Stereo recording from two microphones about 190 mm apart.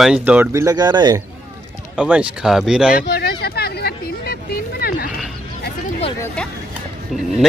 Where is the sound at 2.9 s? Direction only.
55° left (ahead or behind).